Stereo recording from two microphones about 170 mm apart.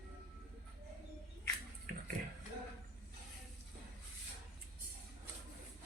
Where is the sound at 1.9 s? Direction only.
55° right (ahead or behind).